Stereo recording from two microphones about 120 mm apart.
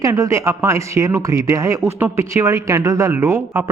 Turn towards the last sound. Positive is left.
turn(degrees=-20)  # may be behind; listen again after turning